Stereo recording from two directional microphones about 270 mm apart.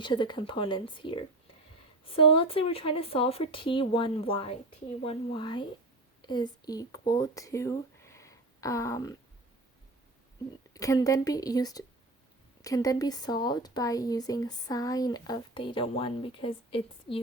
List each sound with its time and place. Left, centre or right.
0.0 s speech: centre
10.8 s speech: centre